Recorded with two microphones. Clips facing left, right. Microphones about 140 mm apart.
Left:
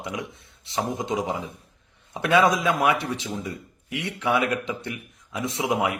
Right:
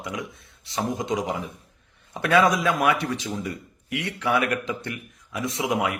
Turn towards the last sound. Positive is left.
turn(degrees=25)  # may be behind; listen again after turning